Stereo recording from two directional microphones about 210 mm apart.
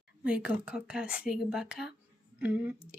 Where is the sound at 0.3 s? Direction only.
5° right (ahead or behind).